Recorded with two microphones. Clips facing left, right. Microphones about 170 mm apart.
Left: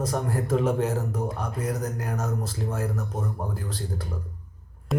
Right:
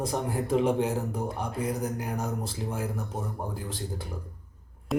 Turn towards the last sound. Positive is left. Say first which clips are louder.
# even
turn(degrees=0)  # may be behind; listen again after turning